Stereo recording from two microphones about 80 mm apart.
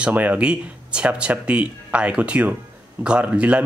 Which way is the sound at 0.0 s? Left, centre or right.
Centre.